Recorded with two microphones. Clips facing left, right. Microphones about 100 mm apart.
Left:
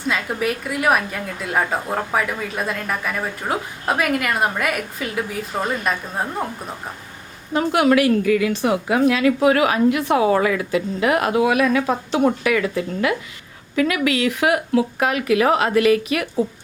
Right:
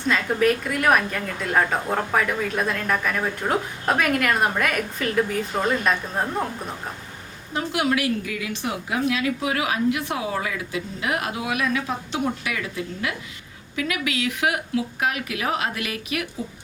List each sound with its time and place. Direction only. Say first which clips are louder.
0.1 s a woman's voice: right 2 dB; 5° left (ahead or behind)
7.5 s a woman's voice: left 7 dB; 55° left (ahead or behind)
13.7 s speech: left 7 dB; 50° left (ahead or behind)